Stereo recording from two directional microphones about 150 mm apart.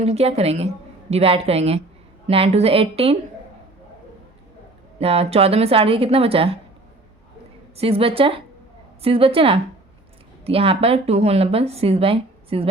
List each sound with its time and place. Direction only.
0.0 s a woman's voice: 45° right (ahead or behind)
4.9 s speech: 40° right (ahead or behind)
7.8 s speech: 40° right (ahead or behind)